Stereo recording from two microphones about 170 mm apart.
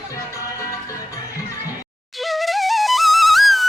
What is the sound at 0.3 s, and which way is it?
Music, 20° left (ahead or behind).